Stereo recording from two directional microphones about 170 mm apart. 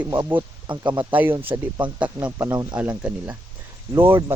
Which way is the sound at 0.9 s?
10° right (ahead or behind).